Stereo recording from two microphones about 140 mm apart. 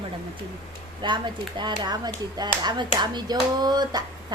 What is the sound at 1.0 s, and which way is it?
Speech, 35° right (ahead or behind).